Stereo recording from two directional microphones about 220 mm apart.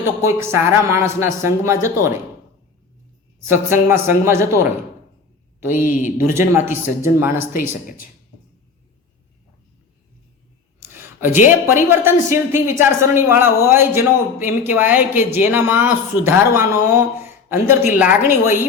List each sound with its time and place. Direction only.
0.2 s speech: 10° right (ahead or behind)
3.5 s speech: 10° right (ahead or behind)
5.8 s speech: 35° left (ahead or behind)
6.5 s speech: 10° right (ahead or behind)
10.8 s a sound: 10° right (ahead or behind)
11.6 s speech: 10° right (ahead or behind)